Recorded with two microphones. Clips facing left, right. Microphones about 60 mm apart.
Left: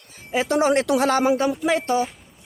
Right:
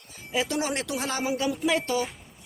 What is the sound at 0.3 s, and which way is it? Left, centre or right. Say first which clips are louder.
Speech: left 8 dB; left.